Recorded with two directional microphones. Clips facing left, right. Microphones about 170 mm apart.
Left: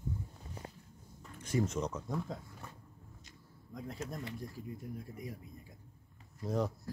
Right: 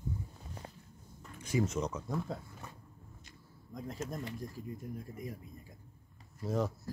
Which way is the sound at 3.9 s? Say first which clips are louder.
Right 2 dB; 45° right (ahead or behind).